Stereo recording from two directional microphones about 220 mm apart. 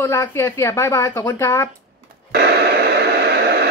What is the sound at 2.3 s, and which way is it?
Radio, 50° right (ahead or behind).